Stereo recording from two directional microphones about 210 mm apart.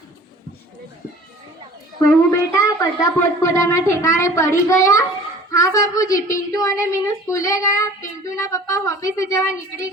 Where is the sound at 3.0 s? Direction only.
15° left (ahead or behind).